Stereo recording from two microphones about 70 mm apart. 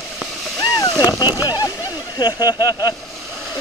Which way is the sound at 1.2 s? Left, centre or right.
Left.